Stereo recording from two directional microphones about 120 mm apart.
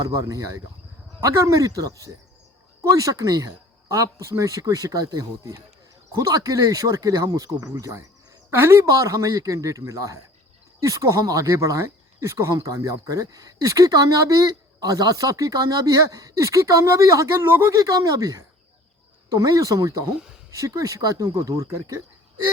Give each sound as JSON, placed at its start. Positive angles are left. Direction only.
{"t": 0.0, "sound": "speech", "side_deg": -30}